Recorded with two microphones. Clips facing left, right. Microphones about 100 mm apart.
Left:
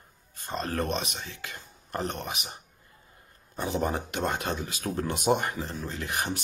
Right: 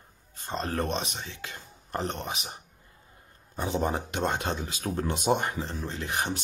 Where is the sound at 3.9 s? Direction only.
25° right (ahead or behind).